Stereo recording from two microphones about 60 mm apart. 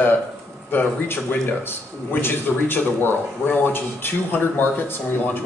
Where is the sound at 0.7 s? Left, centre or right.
Left.